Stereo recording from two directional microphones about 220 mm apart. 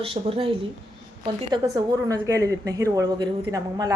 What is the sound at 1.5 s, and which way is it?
A woman's voice, 20° right (ahead or behind).